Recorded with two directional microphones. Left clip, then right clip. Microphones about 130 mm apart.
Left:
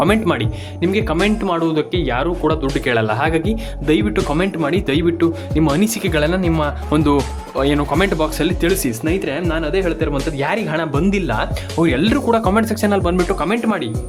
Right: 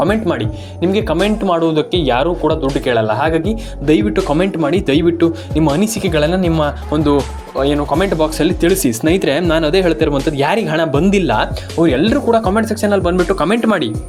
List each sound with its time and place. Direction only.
0.1 s speech: 5° left (ahead or behind)
2.4 s speech: 5° left (ahead or behind); by 6.7 s 15° right (ahead or behind)
6.9 s speech: centre (ahead or behind)
8.4 s speech: 10° right (ahead or behind)
8.9 s speech: 30° right (ahead or behind)
11.8 s speech: centre (ahead or behind)
13.3 s speech: 25° right (ahead or behind)